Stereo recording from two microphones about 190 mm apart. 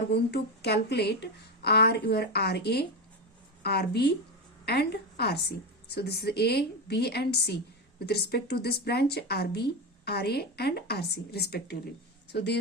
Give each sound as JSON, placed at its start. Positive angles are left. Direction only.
{"t": 0.1, "sound": "a woman's voice", "side_deg": 60}